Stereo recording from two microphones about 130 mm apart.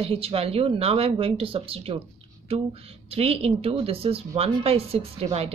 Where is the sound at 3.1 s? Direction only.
50° right (ahead or behind).